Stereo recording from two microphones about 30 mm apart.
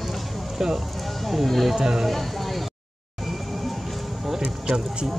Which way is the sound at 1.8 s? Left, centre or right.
Right.